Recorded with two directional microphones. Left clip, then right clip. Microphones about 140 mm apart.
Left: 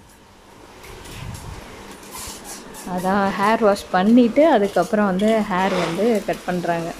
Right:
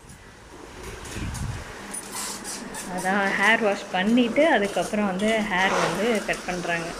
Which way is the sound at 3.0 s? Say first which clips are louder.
Left 2 dB; 30° left (ahead or behind).